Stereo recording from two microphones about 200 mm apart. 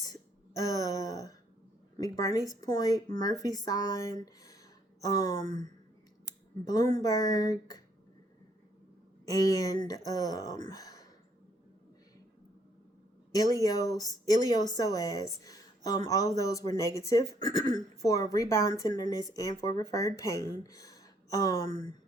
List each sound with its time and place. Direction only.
0.0 s throat clearing: 15° left (ahead or behind)
2.0 s speech: 15° left (ahead or behind)
6.7 s speech: 20° left (ahead or behind)
9.2 s speech: 15° left (ahead or behind)
13.3 s speech: 15° left (ahead or behind)